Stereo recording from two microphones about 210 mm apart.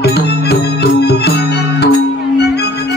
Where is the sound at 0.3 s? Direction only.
50° left (ahead or behind).